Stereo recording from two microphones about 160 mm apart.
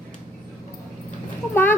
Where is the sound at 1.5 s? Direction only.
15° left (ahead or behind).